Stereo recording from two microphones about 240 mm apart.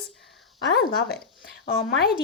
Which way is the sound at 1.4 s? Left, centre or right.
Left.